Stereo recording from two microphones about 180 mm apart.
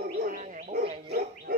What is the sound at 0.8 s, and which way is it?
Dog, 35° right (ahead or behind).